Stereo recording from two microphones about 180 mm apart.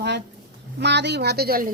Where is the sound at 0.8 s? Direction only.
70° right (ahead or behind).